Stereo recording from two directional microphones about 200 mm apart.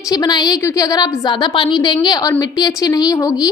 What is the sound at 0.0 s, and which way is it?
A woman's voice, 20° left (ahead or behind).